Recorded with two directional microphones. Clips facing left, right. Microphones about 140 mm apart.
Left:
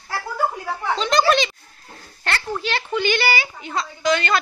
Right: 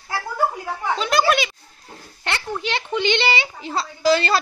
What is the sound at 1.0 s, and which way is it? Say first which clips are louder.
Speech: left 1 dB; 5° right (ahead or behind).